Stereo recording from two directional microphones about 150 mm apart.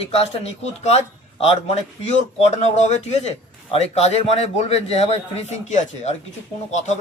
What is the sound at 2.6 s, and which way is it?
A man's voice, 50° left (ahead or behind).